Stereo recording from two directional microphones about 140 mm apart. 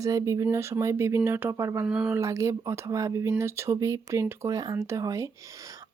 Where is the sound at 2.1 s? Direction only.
20° right (ahead or behind).